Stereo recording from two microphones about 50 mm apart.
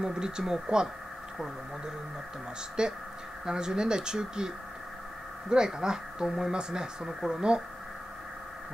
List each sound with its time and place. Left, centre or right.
0.0 s speech: centre
2.8 s speech: centre
5.5 s speech: centre